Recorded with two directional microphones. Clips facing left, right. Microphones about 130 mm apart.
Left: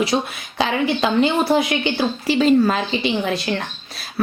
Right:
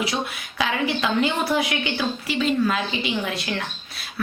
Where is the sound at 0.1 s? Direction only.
35° left (ahead or behind).